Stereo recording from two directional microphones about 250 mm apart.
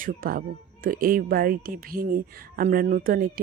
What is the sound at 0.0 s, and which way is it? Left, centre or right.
A woman's voice, right.